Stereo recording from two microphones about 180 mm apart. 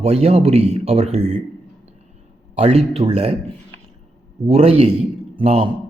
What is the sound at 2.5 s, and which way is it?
Speech, 35° right (ahead or behind).